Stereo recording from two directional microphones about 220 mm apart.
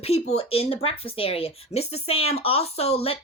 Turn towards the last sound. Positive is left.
turn(degrees=25)  # may be behind; listen again after turning